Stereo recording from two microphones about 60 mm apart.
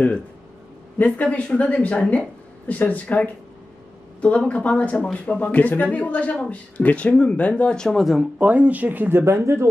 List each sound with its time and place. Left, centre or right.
0.9 s speech: left
8.0 s speech: centre
8.4 s speech: right
9.2 s speech: right